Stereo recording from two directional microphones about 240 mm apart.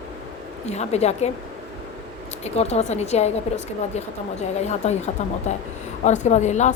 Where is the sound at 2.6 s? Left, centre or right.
Left.